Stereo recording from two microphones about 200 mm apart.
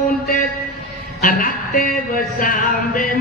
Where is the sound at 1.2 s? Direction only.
45° left (ahead or behind).